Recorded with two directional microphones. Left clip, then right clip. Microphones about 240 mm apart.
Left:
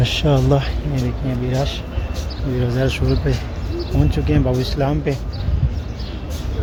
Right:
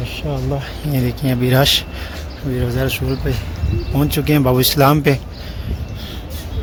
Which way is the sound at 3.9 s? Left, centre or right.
Right.